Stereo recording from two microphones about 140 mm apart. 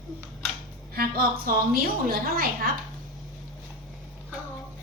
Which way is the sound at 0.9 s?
90° right.